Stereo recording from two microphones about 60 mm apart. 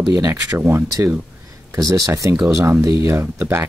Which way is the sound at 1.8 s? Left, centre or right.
Right.